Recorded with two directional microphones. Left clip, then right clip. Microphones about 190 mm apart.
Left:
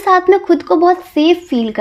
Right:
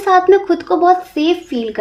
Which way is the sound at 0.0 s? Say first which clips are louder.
Even; 45° left (ahead or behind).